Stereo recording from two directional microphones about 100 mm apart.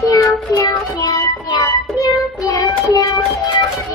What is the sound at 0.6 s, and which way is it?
Child singing, 40° left (ahead or behind).